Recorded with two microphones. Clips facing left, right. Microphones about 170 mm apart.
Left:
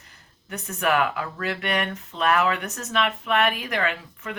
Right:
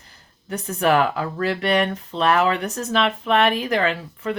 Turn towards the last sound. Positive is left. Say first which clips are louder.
# right 5 dB
turn(degrees=-30)  # may be behind; listen again after turning